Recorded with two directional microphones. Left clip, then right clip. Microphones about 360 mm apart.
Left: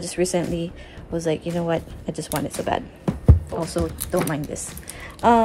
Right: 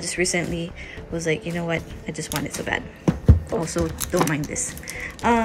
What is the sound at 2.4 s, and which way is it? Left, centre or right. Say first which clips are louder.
Music: left 2 dB; centre.